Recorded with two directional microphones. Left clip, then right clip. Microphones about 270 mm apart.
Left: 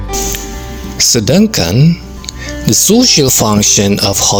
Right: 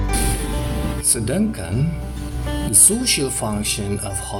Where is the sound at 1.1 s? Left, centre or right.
Left.